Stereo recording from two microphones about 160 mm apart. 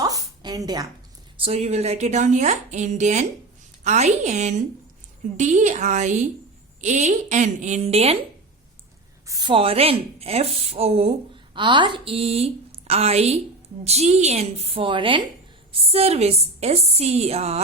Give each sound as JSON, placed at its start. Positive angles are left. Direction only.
{"t": 0.0, "sound": "a sound", "side_deg": -25}
{"t": 1.4, "sound": "a woman's voice", "side_deg": -40}
{"t": 9.2, "sound": "a woman's voice", "side_deg": -25}